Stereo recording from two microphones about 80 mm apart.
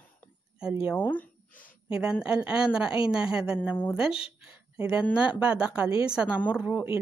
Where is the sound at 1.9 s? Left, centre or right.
Centre.